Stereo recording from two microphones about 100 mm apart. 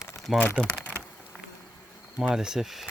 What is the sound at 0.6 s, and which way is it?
Speech, 10° left (ahead or behind).